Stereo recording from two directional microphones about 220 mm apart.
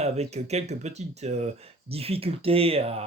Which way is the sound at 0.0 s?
30° right (ahead or behind).